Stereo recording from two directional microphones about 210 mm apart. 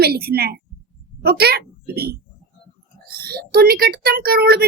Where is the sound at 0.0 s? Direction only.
50° right (ahead or behind).